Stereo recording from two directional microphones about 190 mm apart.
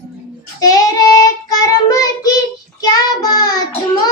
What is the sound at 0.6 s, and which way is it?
Child singing, 20° left (ahead or behind).